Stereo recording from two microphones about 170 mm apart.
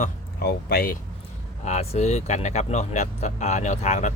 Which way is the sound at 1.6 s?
40° left (ahead or behind).